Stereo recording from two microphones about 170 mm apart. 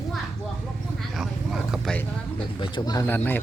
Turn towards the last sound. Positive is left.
turn(degrees=10)  # may be behind; listen again after turning